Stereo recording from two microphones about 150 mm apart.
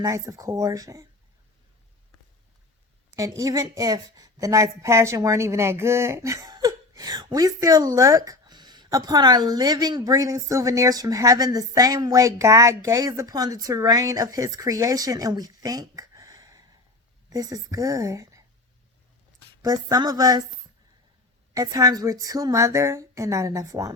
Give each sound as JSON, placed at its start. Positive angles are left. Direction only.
{"t": 0.0, "sound": "a woman's voice", "side_deg": -20}
{"t": 3.2, "sound": "a woman's voice", "side_deg": -20}
{"t": 19.6, "sound": "a woman's voice", "side_deg": -25}
{"t": 21.5, "sound": "a woman's voice", "side_deg": -25}